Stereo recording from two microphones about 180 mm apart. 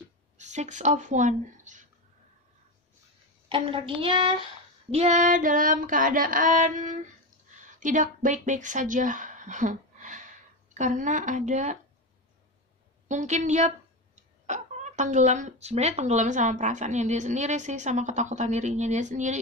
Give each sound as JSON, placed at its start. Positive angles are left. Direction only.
{"t": 0.4, "sound": "speech", "side_deg": -40}
{"t": 3.4, "sound": "speech", "side_deg": -30}
{"t": 4.9, "sound": "female singing", "side_deg": -40}
{"t": 7.6, "sound": "speech", "side_deg": -45}
{"t": 13.1, "sound": "speech", "side_deg": -40}